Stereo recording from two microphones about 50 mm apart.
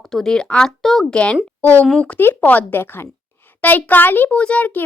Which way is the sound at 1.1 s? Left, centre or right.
Left.